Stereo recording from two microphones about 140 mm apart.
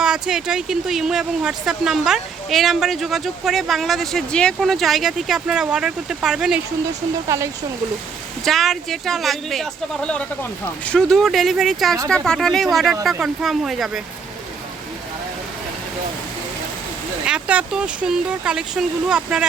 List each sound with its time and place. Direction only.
0.0 s speech: 5° right (ahead or behind)
7.3 s speech: 20° right (ahead or behind)
8.4 s speech: centre (ahead or behind)
17.2 s speech: 10° right (ahead or behind)